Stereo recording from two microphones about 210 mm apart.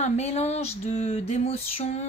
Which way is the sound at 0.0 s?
30° left (ahead or behind).